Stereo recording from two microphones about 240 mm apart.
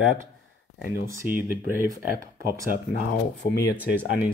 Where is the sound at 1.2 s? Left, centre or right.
Centre.